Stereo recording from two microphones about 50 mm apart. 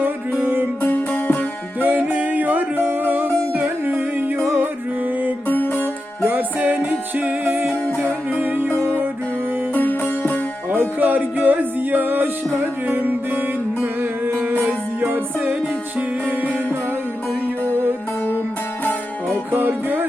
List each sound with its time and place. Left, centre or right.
0.0 s music: right
0.8 s music: left
1.8 s music: right
5.5 s music: left
6.2 s music: right
8.7 s music: right
10.7 s music: right
15.0 s music: right
19.5 s music: right